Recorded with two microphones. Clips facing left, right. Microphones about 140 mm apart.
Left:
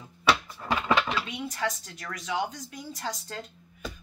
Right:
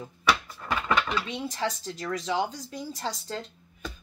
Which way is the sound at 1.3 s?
30° right (ahead or behind).